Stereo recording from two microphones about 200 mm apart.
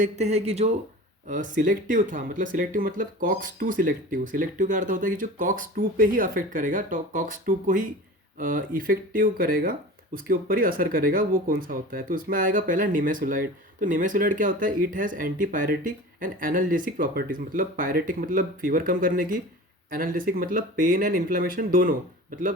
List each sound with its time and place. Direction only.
0.0 s speech: 35° right (ahead or behind)